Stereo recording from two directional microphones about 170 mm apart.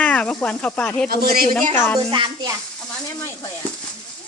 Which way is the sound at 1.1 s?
60° right (ahead or behind).